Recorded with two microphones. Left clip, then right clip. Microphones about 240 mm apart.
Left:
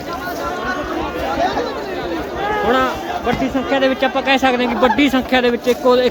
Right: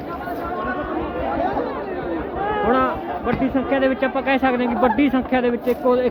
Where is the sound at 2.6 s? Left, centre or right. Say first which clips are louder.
Left 2 dB; centre.